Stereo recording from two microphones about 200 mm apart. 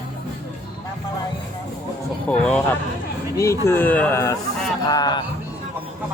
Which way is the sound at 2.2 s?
5° left (ahead or behind).